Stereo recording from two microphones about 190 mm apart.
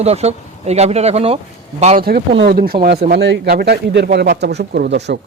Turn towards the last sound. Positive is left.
turn(degrees=-65)  # may be behind; listen again after turning